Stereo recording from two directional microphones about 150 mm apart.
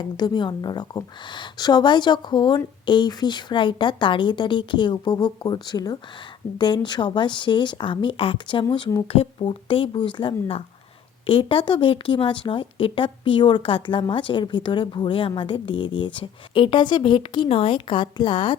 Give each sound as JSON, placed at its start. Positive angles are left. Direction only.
{"t": 0.0, "sound": "speech", "side_deg": 30}